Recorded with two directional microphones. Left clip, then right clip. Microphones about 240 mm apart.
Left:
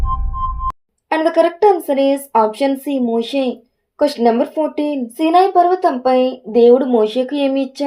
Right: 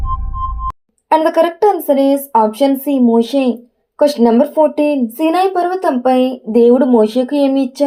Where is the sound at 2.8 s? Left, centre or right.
Centre.